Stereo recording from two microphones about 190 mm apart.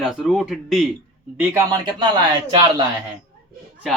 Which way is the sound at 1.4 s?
15° right (ahead or behind).